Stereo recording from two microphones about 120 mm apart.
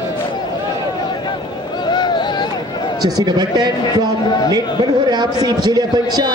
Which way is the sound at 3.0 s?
35° right (ahead or behind).